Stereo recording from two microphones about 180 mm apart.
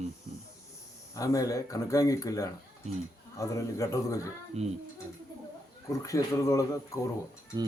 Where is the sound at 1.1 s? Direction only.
20° left (ahead or behind).